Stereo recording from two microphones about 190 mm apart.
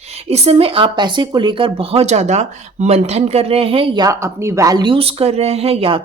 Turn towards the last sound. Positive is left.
turn(degrees=-30)  # may be behind; listen again after turning